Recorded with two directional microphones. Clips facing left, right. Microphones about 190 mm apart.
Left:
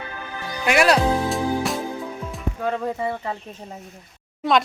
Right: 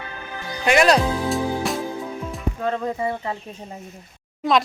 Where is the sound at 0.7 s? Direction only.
5° left (ahead or behind).